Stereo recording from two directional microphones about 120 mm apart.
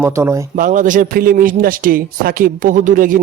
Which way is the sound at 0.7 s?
90° right.